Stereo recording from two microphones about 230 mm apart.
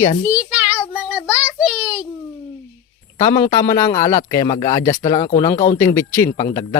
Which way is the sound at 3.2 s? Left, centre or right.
Centre.